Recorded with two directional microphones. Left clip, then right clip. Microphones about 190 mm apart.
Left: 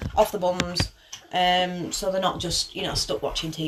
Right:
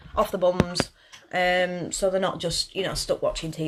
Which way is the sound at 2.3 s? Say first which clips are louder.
Even; 30° right (ahead or behind).